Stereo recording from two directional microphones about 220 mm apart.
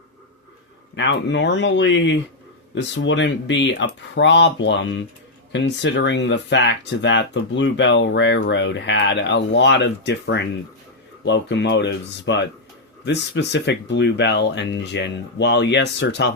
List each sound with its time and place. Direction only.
0.9 s speech: 55° left (ahead or behind)